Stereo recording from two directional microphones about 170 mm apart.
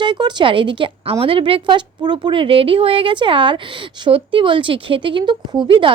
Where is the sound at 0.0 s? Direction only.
25° right (ahead or behind).